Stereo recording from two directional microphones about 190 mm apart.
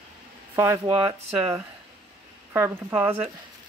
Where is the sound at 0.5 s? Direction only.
15° right (ahead or behind).